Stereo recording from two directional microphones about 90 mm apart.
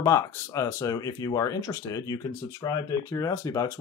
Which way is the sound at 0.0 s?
35° left (ahead or behind).